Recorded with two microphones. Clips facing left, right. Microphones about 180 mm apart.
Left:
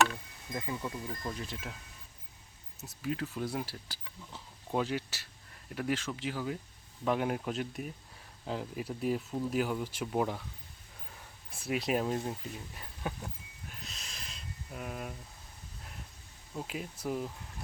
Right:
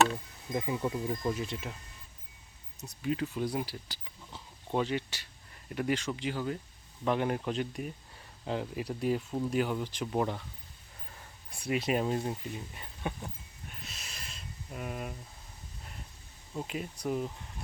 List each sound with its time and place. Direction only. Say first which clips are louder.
0.5 s speech: right 5 dB; 20° right (ahead or behind)
0.9 s speech: right 7 dB; 5° right (ahead or behind)
2.8 s speech: right 3 dB; centre (ahead or behind)
11.5 s speech: right 1 dB; centre (ahead or behind)
16.6 s speech: right 2 dB; centre (ahead or behind)